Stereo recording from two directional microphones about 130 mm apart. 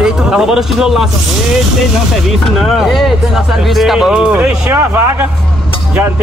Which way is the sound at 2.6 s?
Centre (ahead or behind).